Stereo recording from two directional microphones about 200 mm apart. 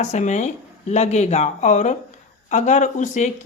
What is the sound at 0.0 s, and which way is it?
Speech, 35° left (ahead or behind).